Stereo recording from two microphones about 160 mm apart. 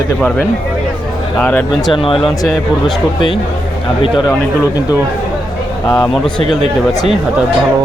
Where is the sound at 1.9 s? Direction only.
35° left (ahead or behind).